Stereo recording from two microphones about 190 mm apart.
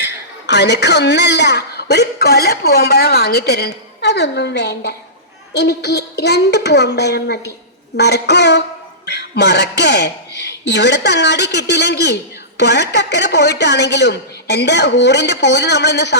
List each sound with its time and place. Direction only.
0.0 s a man's voice: 60° left (ahead or behind)